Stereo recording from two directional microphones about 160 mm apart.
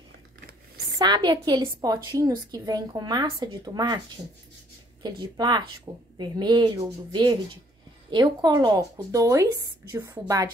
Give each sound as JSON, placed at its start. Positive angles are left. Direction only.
{"t": 0.9, "sound": "a woman's voice", "side_deg": -30}
{"t": 5.0, "sound": "a woman's voice", "side_deg": -25}